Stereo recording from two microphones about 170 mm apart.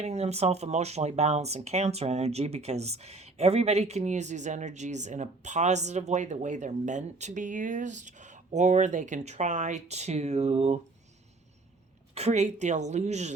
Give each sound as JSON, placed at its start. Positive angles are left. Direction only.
{"t": 0.0, "sound": "speech", "side_deg": -40}
{"t": 12.1, "sound": "speech", "side_deg": -40}